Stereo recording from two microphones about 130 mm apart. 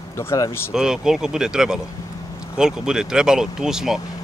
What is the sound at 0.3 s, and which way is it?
Speech, 20° left (ahead or behind).